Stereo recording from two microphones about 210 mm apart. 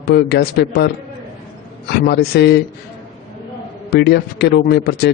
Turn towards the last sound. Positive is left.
turn(degrees=50)  # may be behind; listen again after turning